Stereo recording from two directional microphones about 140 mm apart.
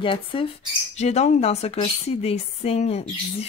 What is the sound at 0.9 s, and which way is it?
A woman's voice, 50° left (ahead or behind).